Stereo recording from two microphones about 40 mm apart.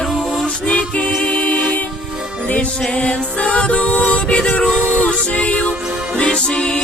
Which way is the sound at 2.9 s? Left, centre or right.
Left.